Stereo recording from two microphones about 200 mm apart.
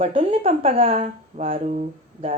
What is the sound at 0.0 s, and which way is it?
A woman's voice, 30° right (ahead or behind).